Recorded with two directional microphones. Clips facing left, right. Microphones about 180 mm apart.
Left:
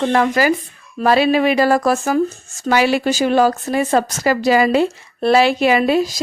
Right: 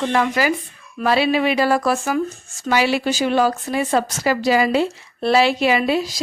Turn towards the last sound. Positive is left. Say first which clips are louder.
# left 4 dB
turn(degrees=45)  # may be behind; listen again after turning